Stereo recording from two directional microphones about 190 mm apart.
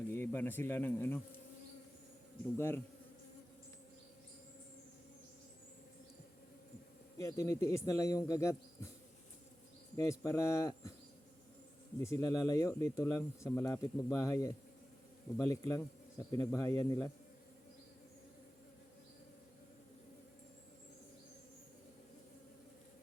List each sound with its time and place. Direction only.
0.1 s speech: 10° left (ahead or behind)
2.6 s speech: 10° left (ahead or behind)
7.2 s speech: 15° left (ahead or behind)
10.0 s speech: 15° left (ahead or behind)
11.9 s speech: 15° left (ahead or behind)